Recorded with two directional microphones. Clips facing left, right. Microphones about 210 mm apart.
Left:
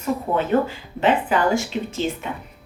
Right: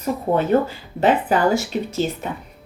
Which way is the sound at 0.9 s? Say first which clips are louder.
Right 2 dB; 40° right (ahead or behind).